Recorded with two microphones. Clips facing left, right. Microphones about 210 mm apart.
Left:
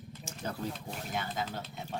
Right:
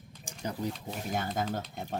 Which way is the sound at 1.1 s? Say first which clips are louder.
Right 4 dB; 45° right (ahead or behind).